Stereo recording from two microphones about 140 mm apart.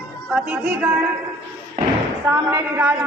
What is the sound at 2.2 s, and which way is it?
Speech, 15° right (ahead or behind).